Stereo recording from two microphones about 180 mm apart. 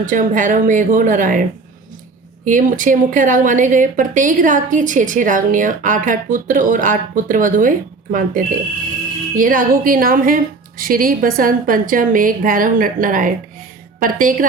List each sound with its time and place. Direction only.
0.0 s speech: 50° right (ahead or behind)